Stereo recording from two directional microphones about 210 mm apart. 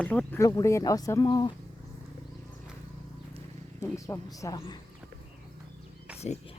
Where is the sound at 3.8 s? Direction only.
15° left (ahead or behind).